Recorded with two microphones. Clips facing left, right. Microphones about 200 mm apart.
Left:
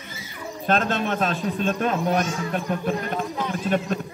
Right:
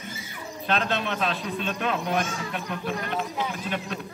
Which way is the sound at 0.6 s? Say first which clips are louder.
Left 4 dB; 45° left (ahead or behind).